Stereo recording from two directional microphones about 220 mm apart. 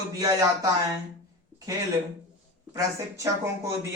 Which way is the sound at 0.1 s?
15° right (ahead or behind).